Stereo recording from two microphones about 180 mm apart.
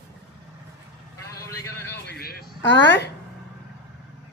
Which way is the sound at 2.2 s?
60° left (ahead or behind).